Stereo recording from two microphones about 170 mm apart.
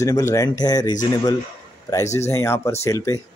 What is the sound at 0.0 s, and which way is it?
Speech, 15° left (ahead or behind).